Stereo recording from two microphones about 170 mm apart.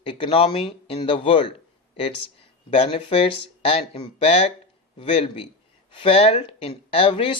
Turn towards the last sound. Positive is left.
turn(degrees=30)  # may be behind; listen again after turning